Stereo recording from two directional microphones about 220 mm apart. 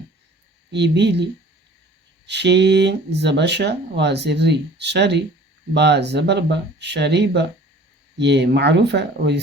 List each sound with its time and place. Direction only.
0.7 s speech: 50° right (ahead or behind)